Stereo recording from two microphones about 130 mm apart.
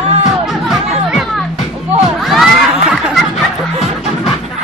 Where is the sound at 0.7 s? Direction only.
Centre (ahead or behind).